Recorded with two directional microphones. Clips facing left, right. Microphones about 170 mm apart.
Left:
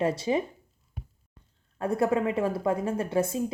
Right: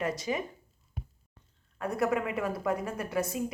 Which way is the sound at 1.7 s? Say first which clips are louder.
Left 4 dB; 30° left (ahead or behind).